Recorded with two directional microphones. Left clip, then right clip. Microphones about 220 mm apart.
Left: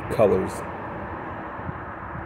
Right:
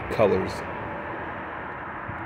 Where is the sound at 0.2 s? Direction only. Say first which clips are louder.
Left 2 dB; 15° left (ahead or behind).